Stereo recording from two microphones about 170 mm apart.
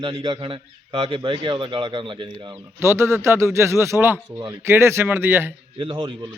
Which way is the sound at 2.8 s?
15° right (ahead or behind).